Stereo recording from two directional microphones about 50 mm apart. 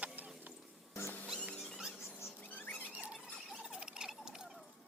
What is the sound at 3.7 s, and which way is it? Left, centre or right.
Rodents, centre.